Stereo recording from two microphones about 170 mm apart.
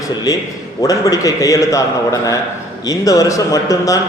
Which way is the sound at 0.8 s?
20° left (ahead or behind).